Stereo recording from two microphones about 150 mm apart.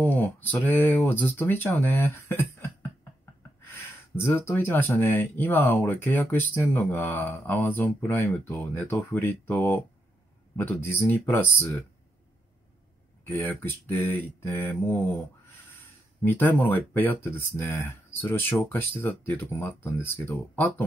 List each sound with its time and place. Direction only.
0.0 s speech: 10° left (ahead or behind)
3.7 s speech: 15° left (ahead or behind)
13.3 s speech: 15° left (ahead or behind)
16.2 s speech: 10° left (ahead or behind)